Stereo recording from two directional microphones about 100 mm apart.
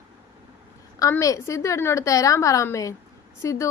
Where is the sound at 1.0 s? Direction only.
35° left (ahead or behind).